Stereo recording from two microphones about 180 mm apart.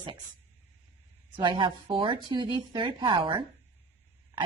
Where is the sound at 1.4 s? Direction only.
25° right (ahead or behind).